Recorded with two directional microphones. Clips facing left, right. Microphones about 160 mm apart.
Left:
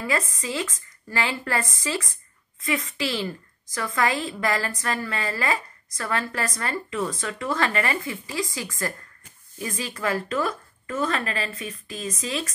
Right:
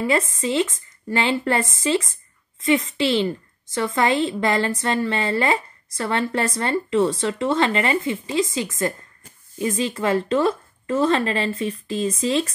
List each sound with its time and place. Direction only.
0.0 s a woman's voice: 25° right (ahead or behind)